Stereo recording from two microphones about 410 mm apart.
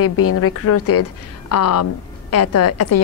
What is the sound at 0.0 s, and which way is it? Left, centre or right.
A woman's voice, left.